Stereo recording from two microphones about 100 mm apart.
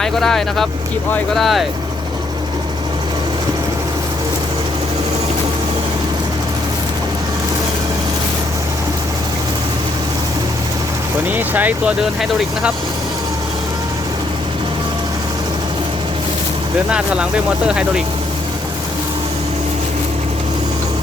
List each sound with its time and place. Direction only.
0.0 s speech: 5° left (ahead or behind)
11.3 s speech: 15° right (ahead or behind)
16.9 s speech: 10° right (ahead or behind)